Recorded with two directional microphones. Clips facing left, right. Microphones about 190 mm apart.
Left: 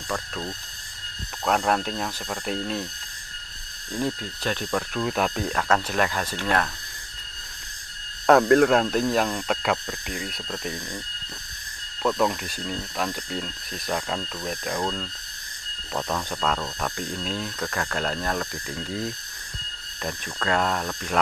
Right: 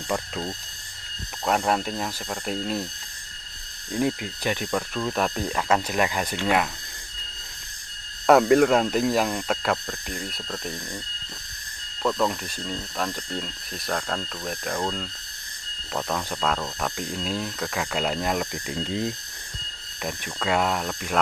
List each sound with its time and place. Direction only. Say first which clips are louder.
0.1 s speech: right 2 dB; 20° right (ahead or behind)
1.4 s speech: even; 5° right (ahead or behind)
3.9 s speech: right 3 dB; 15° right (ahead or behind)
4.9 s speech: left 2 dB; 5° left (ahead or behind)
8.3 s speech: even; 5° right (ahead or behind)
12.0 s speech: left 1 dB; centre (ahead or behind); by 19.1 s 20° right (ahead or behind)
20.0 s speech: even; 5° right (ahead or behind)